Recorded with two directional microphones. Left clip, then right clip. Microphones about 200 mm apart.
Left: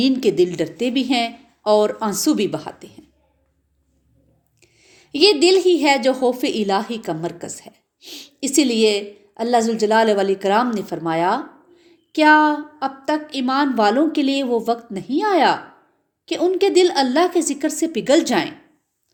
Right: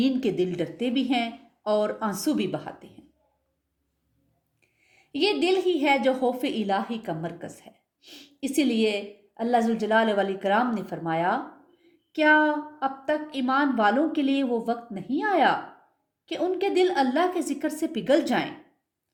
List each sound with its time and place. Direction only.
0.0 s a woman's voice: 40° left (ahead or behind)
4.6 s a woman's voice: 45° left (ahead or behind)